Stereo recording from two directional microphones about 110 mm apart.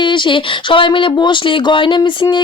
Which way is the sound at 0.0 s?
45° left (ahead or behind).